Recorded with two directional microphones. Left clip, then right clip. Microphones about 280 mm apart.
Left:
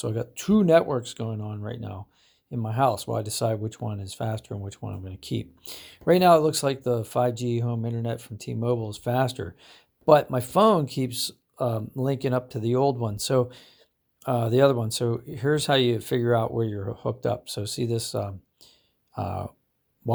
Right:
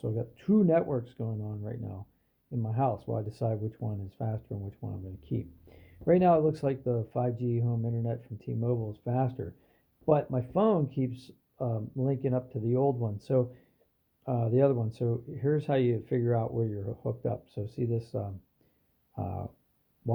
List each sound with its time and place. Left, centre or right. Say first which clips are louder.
0.0 s speech: left 5 dB; left